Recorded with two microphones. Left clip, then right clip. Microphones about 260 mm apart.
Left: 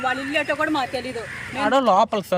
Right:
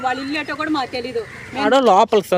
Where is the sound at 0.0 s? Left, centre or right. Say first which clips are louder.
Right 1 dB; right.